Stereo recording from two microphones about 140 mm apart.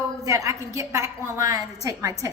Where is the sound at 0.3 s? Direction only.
20° right (ahead or behind).